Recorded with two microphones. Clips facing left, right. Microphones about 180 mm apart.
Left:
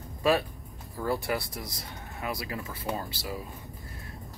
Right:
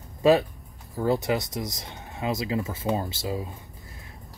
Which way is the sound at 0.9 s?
20° right (ahead or behind).